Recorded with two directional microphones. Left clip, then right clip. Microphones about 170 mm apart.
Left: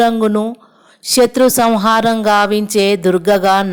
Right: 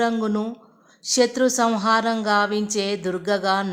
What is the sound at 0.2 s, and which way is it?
A woman's voice, 40° left (ahead or behind).